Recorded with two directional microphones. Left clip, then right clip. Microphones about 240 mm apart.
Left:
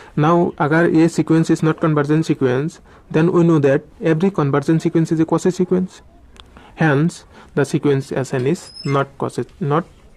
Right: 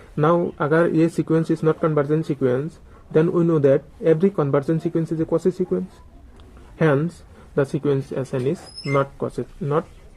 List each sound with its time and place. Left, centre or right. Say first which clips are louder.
0.2 s speech: left 3 dB; left
6.3 s a sound: left 7 dB; left
7.5 s speech: left 4 dB; left